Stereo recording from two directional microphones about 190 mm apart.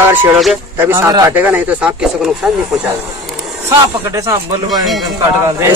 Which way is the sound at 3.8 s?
15° right (ahead or behind).